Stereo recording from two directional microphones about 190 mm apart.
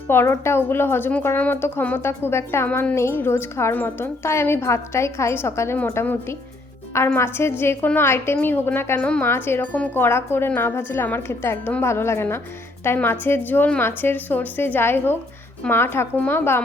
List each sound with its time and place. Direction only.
0.1 s a woman's voice: 15° left (ahead or behind)